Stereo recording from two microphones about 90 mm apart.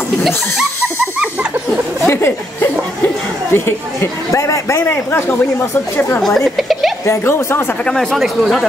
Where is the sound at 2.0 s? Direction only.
25° left (ahead or behind).